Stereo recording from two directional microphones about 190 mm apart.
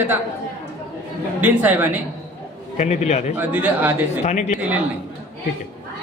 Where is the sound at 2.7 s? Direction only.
35° left (ahead or behind).